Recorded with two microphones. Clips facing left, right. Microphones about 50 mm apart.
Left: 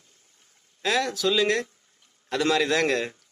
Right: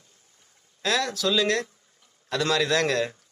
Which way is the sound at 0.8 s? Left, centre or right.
Centre.